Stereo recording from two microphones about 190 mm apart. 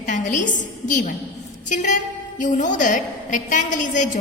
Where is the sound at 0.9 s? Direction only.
40° left (ahead or behind).